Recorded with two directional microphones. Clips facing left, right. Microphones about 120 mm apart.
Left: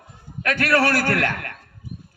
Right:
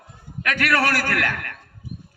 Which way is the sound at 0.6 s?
40° left (ahead or behind).